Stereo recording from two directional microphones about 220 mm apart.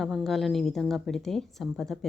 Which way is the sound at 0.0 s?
Centre (ahead or behind).